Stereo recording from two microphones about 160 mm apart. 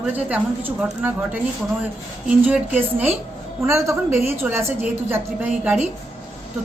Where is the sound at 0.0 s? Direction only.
10° right (ahead or behind).